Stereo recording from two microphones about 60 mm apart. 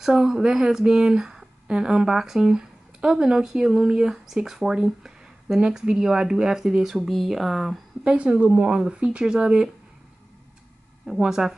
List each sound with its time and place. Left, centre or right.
0.0 s speech: centre
8.0 s speech: centre
11.1 s speech: centre